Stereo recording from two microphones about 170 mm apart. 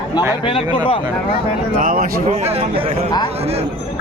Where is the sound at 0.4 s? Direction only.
30° left (ahead or behind).